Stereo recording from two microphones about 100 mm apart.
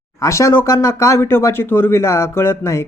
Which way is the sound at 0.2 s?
30° left (ahead or behind).